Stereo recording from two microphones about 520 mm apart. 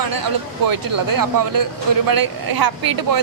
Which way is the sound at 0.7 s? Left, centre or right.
Right.